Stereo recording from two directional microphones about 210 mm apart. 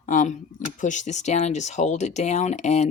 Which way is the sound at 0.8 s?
35° left (ahead or behind).